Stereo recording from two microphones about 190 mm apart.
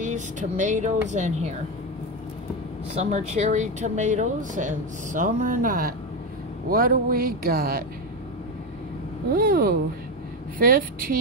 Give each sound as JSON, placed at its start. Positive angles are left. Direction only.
{"t": 0.0, "sound": "speech", "side_deg": -40}
{"t": 2.9, "sound": "speech", "side_deg": -35}
{"t": 9.3, "sound": "speech", "side_deg": -50}